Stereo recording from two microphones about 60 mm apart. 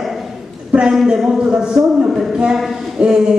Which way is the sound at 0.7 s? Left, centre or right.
Centre.